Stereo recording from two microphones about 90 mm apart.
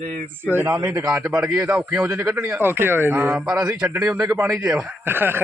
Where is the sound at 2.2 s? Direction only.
30° right (ahead or behind).